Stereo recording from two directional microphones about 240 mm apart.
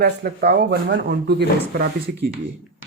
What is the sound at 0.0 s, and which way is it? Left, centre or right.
Speech, right.